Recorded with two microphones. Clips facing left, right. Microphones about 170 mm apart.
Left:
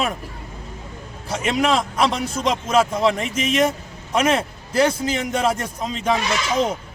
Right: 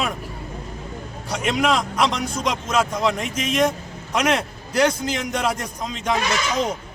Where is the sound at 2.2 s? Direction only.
25° left (ahead or behind).